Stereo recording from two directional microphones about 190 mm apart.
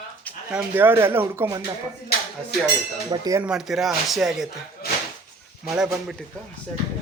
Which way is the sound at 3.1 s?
20° right (ahead or behind).